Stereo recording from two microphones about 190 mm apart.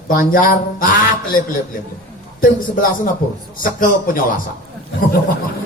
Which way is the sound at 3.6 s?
45° left (ahead or behind).